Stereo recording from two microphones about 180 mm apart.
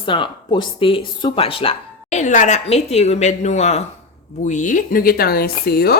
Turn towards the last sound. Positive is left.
turn(degrees=60)  # may be behind; listen again after turning